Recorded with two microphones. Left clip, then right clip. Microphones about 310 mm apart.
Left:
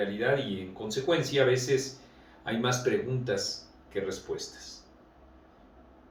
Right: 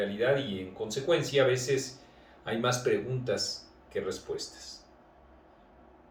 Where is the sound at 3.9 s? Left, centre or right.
Centre.